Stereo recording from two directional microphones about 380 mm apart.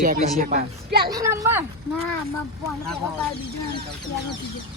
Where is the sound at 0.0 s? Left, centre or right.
Right.